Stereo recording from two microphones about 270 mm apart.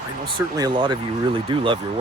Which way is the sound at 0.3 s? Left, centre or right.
Centre.